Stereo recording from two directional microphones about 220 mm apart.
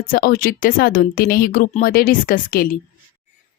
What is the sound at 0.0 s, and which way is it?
A woman's voice, 40° left (ahead or behind).